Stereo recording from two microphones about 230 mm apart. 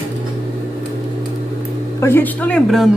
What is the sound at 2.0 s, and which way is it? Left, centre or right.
Speech, centre.